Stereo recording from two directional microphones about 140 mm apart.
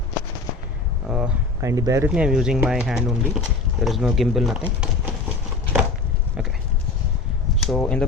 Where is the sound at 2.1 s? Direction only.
5° right (ahead or behind).